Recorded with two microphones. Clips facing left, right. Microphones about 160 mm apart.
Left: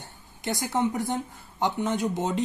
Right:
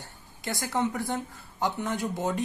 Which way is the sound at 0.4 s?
20° left (ahead or behind).